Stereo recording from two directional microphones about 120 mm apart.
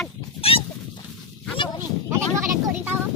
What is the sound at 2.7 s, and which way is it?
Speech, 15° right (ahead or behind).